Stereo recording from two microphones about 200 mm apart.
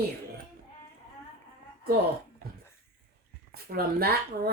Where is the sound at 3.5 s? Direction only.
50° right (ahead or behind).